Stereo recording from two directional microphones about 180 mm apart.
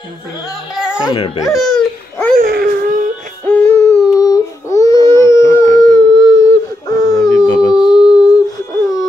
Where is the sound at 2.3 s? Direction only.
55° right (ahead or behind).